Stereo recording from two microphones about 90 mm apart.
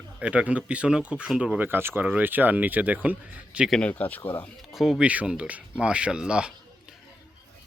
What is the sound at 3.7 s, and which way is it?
Speech, 10° left (ahead or behind).